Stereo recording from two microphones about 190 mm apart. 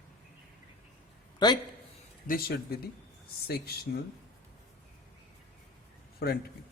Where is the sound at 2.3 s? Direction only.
55° left (ahead or behind).